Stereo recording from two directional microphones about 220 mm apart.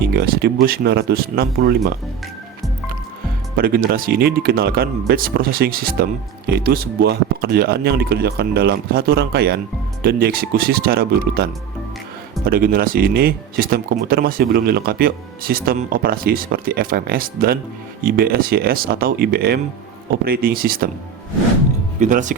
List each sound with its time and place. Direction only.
0.0 s speech: 50° right (ahead or behind)
3.6 s speech: 40° right (ahead or behind)
12.5 s speech: 45° right (ahead or behind)
22.0 s speech: 35° right (ahead or behind)